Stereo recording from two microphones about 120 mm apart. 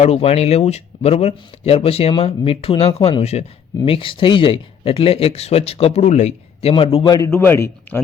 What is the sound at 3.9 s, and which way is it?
Speech, 50° left (ahead or behind).